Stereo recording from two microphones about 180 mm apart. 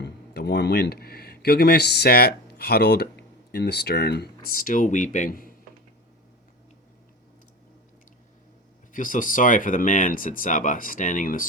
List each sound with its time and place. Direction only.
0.0 s speech: 70° left (ahead or behind); by 5.5 s 50° left (ahead or behind)
8.9 s speech: 50° left (ahead or behind)